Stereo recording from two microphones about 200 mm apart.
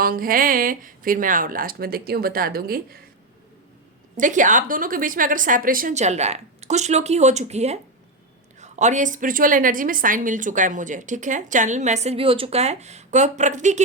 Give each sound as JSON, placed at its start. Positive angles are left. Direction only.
{"t": 0.0, "sound": "speech", "side_deg": -45}
{"t": 4.2, "sound": "a woman's voice", "side_deg": -40}